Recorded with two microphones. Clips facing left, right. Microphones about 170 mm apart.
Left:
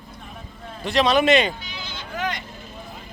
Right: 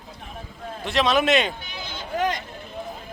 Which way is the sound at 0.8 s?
Centre (ahead or behind).